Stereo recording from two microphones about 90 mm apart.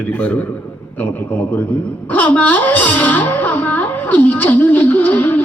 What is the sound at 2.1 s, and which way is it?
Music, 15° left (ahead or behind).